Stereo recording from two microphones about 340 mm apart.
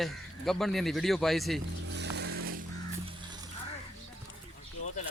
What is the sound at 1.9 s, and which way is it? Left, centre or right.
Snoring, right.